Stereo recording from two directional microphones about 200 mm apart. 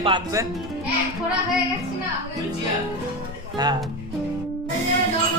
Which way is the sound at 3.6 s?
20° right (ahead or behind).